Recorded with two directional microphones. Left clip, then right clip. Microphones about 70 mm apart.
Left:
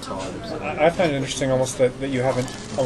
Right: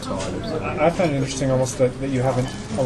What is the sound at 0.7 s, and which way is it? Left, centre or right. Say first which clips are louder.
Speech: left 1 dB; left.